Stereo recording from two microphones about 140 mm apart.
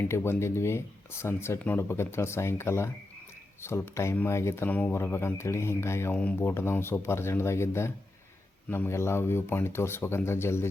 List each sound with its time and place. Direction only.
0.0 s speech: 15° left (ahead or behind)